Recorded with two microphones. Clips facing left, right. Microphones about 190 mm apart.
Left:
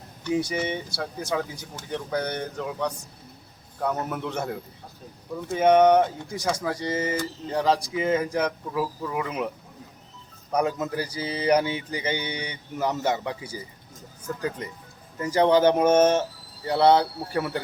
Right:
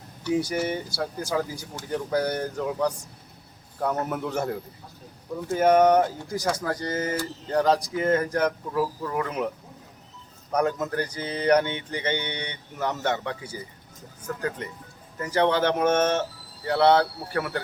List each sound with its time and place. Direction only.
0.3 s speech: 5° right (ahead or behind)
10.5 s music: 10° left (ahead or behind)
15.2 s music: 15° left (ahead or behind)